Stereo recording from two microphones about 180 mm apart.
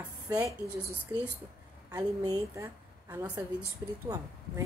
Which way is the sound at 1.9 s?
20° right (ahead or behind).